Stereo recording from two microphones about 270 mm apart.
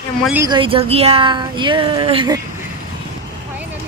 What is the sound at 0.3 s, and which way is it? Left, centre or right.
Speech, centre.